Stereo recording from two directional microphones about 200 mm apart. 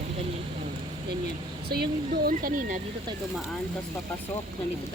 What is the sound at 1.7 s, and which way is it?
Speech, 50° right (ahead or behind).